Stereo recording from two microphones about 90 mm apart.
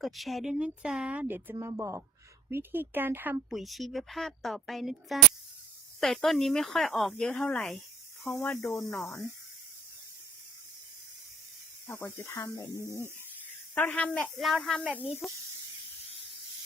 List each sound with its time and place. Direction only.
0.0 s speech: centre (ahead or behind)
0.5 s speech: 10° right (ahead or behind)
1.6 s speech: 35° right (ahead or behind)
2.5 s speech: 25° right (ahead or behind)
3.5 s speech: centre (ahead or behind)
11.9 s speech: 25° left (ahead or behind)
13.7 s speech: 20° left (ahead or behind)
14.3 s speech: centre (ahead or behind)